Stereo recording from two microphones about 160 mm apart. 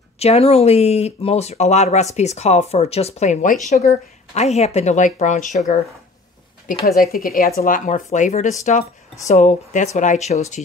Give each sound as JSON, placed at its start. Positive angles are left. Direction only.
{"t": 0.2, "sound": "speech", "side_deg": 40}
{"t": 7.0, "sound": "speech", "side_deg": 65}